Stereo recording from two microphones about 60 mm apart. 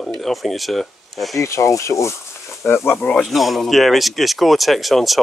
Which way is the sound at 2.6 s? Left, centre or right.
Left.